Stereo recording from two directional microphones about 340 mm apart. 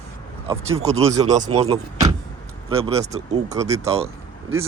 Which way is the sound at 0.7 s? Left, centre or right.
Centre.